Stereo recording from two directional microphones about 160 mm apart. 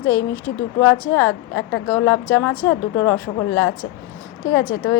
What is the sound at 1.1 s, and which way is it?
A woman's voice, 15° left (ahead or behind).